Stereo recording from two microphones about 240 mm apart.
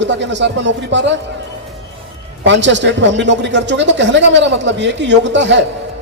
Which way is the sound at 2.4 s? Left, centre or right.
Right.